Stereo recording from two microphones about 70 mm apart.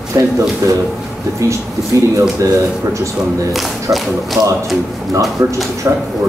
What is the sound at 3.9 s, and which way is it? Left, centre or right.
Speech, right.